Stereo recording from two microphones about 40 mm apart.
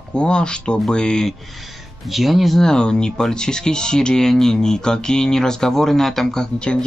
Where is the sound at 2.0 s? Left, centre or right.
Centre.